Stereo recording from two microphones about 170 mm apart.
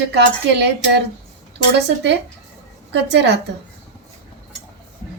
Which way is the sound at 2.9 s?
90° right.